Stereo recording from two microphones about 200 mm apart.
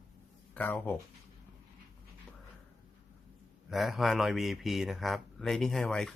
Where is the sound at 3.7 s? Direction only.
Centre (ahead or behind).